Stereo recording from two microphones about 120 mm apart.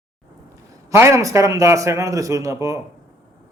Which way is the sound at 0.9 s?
25° right (ahead or behind).